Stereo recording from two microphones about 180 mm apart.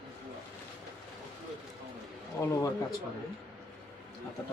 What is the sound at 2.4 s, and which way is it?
Speech, 15° left (ahead or behind).